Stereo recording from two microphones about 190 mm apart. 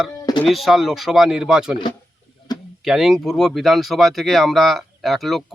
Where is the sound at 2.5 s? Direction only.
20° left (ahead or behind).